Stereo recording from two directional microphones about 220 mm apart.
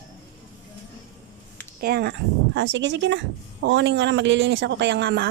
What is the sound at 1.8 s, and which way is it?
A woman's voice, 45° right (ahead or behind).